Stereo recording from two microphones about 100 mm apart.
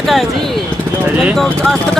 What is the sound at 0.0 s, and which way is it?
Speech, centre (ahead or behind).